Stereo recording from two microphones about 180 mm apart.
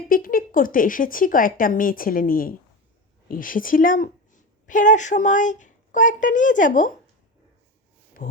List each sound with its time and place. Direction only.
0.1 s a woman's voice: 50° left (ahead or behind)
8.2 s speech: 45° left (ahead or behind)